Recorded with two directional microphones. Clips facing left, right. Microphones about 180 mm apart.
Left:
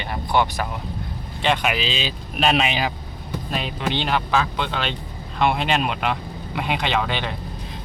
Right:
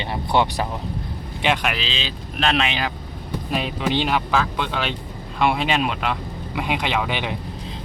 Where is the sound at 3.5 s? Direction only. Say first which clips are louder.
Right 3 dB; centre (ahead or behind).